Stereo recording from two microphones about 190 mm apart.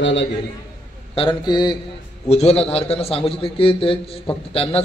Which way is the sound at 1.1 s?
25° left (ahead or behind).